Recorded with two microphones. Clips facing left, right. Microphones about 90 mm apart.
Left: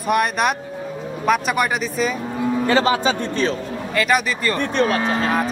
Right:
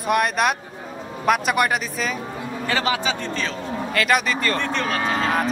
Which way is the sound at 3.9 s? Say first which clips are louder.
Left 2 dB; centre (ahead or behind).